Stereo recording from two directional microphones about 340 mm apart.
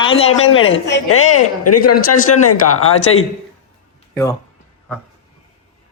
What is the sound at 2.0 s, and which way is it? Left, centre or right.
Speech, left.